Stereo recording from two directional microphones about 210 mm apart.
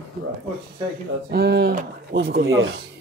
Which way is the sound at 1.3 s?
50° right (ahead or behind).